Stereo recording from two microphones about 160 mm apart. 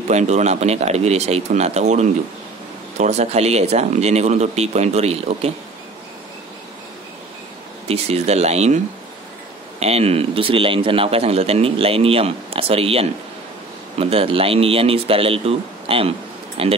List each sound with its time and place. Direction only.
0.1 s speech: 45° right (ahead or behind)
7.9 s a man's voice: 40° right (ahead or behind)